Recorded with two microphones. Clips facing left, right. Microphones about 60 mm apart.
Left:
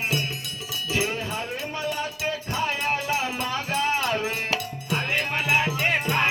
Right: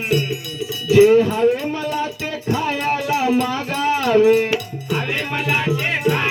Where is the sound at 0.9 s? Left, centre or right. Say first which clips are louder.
Right 17 dB; right.